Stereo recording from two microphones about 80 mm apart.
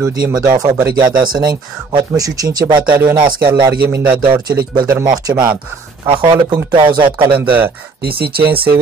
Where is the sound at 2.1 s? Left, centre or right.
Right.